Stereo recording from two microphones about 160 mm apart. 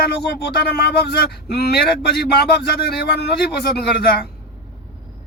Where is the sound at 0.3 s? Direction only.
90° left.